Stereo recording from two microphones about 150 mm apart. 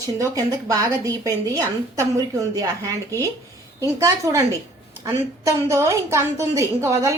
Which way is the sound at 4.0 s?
20° right (ahead or behind).